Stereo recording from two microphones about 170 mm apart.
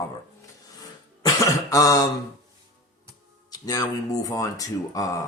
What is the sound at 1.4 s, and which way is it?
Cough, 20° left (ahead or behind).